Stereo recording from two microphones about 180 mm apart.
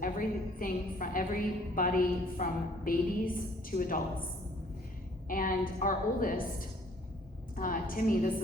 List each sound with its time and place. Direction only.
0.0 s a woman's voice: 50° left (ahead or behind)
5.3 s a woman's voice: 50° left (ahead or behind)
7.5 s a woman's voice: 50° left (ahead or behind)